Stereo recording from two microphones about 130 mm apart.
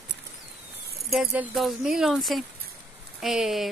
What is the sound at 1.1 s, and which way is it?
Speech, 5° right (ahead or behind).